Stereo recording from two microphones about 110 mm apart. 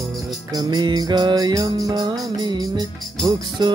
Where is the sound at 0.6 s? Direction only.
40° right (ahead or behind).